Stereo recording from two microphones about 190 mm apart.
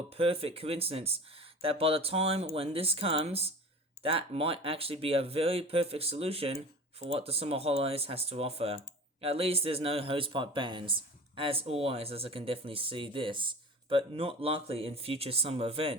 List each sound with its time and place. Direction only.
0.1 s speech: 30° right (ahead or behind)